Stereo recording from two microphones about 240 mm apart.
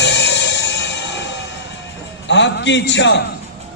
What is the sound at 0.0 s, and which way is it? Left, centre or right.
Music, left.